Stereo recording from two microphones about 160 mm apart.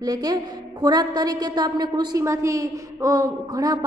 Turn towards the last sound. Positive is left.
turn(degrees=-20)  # may be behind; listen again after turning